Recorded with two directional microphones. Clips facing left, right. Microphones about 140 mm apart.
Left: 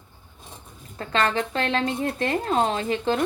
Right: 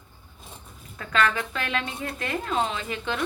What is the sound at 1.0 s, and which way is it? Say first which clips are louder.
Speech: left 2 dB; 30° left (ahead or behind).